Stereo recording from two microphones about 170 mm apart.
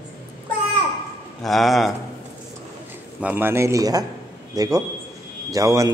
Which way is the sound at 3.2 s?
10° right (ahead or behind).